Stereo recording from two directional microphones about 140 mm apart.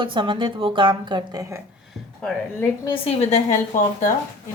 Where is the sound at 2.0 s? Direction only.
Centre (ahead or behind).